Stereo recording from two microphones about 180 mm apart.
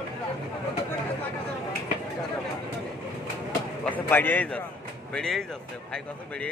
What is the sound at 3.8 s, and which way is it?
A man's voice, 10° left (ahead or behind).